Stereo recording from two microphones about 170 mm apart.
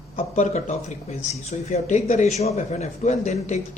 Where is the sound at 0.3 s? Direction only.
45° left (ahead or behind).